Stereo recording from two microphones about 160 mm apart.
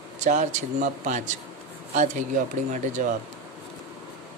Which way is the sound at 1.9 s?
50° right (ahead or behind).